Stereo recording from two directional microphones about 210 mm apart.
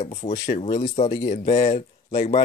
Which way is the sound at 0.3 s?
35° left (ahead or behind).